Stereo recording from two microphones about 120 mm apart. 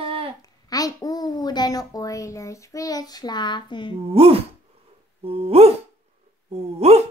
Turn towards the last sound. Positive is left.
turn(degrees=-60)  # may be behind; listen again after turning